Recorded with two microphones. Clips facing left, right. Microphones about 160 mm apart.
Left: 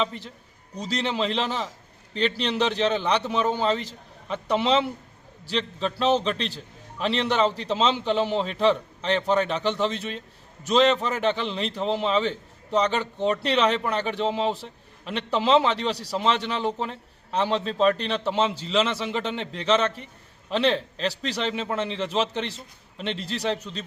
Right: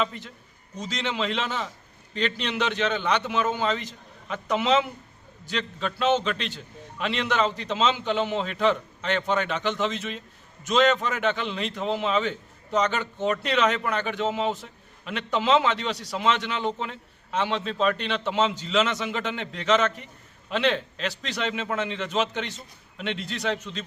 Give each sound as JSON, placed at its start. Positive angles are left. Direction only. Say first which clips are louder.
{"t": 0.8, "sound": "a man's voice", "louder": "left 3 dB", "side_deg": 35}